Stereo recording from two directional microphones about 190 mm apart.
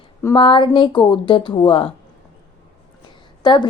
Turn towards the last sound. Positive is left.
turn(degrees=20)  # may be behind; listen again after turning